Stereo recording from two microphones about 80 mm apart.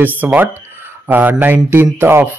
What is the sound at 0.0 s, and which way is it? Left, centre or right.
Speech, right.